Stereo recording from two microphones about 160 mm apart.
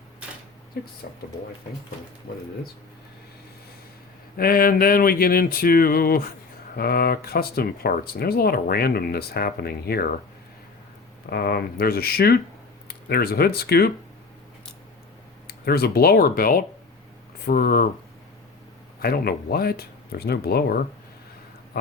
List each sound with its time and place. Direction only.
1.0 s speech: 75° left (ahead or behind)
4.4 s speech: 65° left (ahead or behind)
11.3 s speech: 75° left (ahead or behind)
15.4 s speech: 75° left (ahead or behind)
19.0 s speech: 70° left (ahead or behind)